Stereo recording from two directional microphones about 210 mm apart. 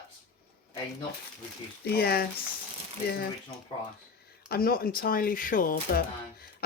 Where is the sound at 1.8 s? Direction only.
50° left (ahead or behind).